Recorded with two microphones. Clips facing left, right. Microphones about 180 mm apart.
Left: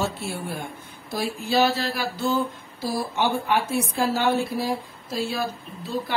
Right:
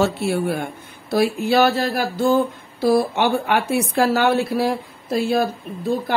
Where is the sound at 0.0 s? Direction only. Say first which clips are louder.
Right 9 dB; 70° right (ahead or behind).